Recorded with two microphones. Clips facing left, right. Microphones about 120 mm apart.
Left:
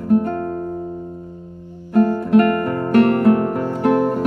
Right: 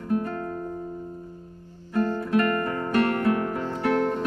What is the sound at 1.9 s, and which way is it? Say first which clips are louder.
Music: left 9 dB; 45° left (ahead or behind).